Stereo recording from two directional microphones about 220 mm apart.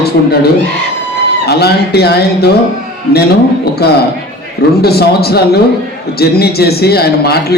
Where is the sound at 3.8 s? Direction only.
45° left (ahead or behind).